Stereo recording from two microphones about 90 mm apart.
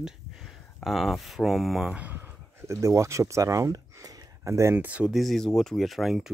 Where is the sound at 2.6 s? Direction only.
35° right (ahead or behind).